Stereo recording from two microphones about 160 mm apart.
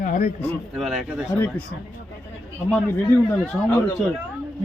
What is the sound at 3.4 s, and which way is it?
Speech, 15° left (ahead or behind).